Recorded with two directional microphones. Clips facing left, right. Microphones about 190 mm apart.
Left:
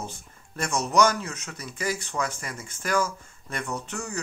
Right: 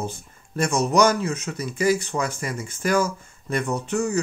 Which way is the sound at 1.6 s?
5° right (ahead or behind).